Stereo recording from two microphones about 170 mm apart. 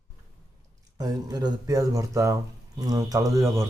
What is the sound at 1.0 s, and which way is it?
Speech, 25° right (ahead or behind).